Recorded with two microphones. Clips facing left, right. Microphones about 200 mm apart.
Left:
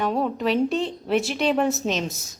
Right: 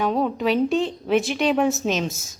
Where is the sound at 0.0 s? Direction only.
Centre (ahead or behind).